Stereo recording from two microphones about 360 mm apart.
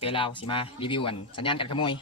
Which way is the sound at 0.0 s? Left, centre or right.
Centre.